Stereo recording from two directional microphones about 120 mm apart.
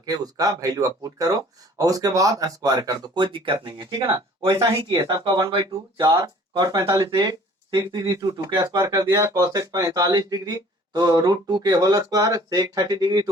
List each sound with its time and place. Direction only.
0.0 s speech: 30° right (ahead or behind)
3.2 s speech: 45° right (ahead or behind)